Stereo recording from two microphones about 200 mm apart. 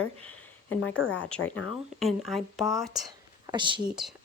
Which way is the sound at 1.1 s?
5° left (ahead or behind).